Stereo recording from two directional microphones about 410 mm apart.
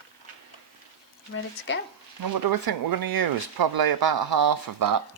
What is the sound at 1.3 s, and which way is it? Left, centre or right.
Speech, left.